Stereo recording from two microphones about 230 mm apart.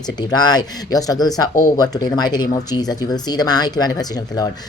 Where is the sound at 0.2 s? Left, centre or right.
Centre.